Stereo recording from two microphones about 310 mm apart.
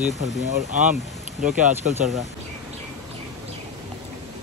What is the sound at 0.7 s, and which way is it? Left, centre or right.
Speech, right.